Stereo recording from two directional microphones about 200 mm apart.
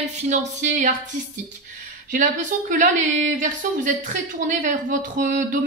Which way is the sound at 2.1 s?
40° right (ahead or behind).